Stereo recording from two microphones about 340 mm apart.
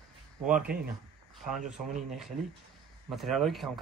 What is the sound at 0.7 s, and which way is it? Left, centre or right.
Speech, right.